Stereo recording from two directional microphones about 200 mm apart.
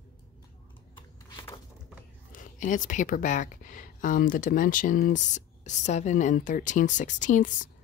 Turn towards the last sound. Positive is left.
turn(degrees=40)  # may be behind; listen again after turning